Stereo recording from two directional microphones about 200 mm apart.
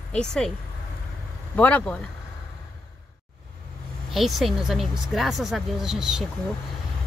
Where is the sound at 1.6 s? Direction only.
5° left (ahead or behind).